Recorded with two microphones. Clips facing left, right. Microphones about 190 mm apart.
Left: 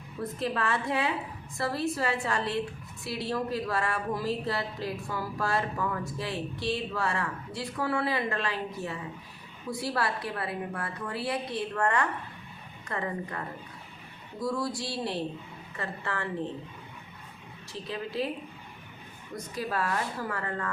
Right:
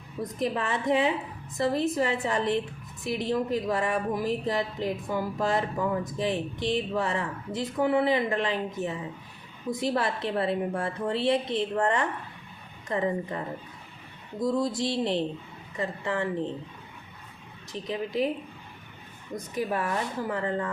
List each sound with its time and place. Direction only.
0.2 s a woman's voice: 15° right (ahead or behind)
17.7 s speech: 15° right (ahead or behind)
19.5 s a woman's voice: 20° right (ahead or behind)